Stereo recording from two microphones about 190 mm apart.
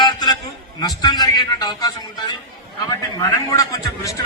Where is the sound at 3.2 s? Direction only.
20° left (ahead or behind).